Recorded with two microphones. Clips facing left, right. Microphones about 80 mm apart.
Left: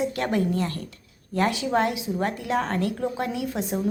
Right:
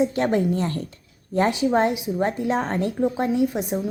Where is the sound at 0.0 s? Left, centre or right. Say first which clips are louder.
Right 4 dB; right.